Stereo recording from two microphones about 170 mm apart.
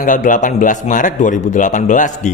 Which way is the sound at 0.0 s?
50° left (ahead or behind).